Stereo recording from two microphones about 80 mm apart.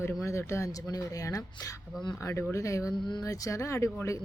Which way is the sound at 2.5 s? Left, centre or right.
Left.